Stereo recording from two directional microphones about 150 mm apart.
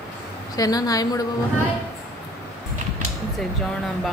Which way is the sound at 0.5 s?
25° left (ahead or behind).